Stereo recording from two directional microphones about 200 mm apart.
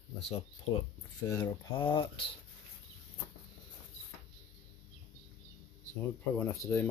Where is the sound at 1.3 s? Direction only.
20° left (ahead or behind).